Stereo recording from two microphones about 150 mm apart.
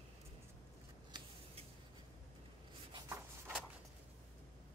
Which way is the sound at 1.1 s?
30° right (ahead or behind).